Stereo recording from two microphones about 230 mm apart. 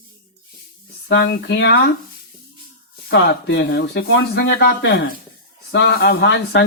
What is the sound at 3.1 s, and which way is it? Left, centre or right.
Speech, left.